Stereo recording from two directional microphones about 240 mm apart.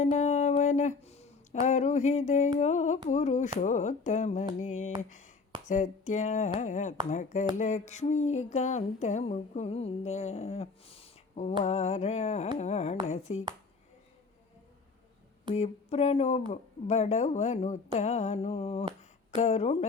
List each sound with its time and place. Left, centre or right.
0.0 s speech: left
2.6 s humming: left
4.6 s speech: left
5.6 s humming: left
7.1 s speech: left
7.6 s humming: left
15.5 s humming: left